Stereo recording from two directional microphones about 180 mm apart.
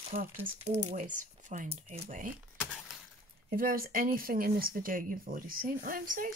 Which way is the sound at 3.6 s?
55° right (ahead or behind).